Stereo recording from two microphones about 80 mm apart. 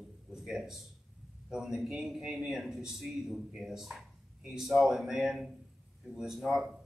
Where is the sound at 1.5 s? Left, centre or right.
Centre.